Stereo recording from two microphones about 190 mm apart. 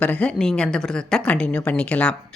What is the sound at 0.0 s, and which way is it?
Speech, 5° left (ahead or behind).